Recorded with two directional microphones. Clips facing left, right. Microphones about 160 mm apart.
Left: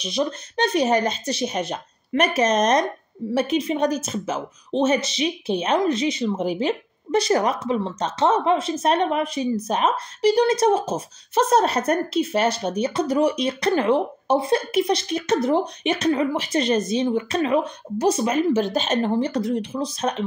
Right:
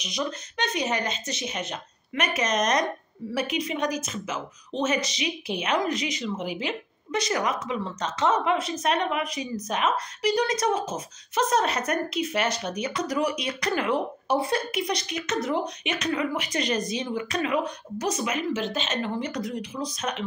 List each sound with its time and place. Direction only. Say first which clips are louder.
0.0 s a woman's voice: left 6 dB; 30° left (ahead or behind)